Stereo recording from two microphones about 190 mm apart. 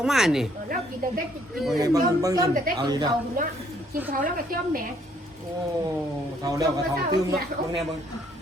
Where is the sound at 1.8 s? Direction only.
20° right (ahead or behind).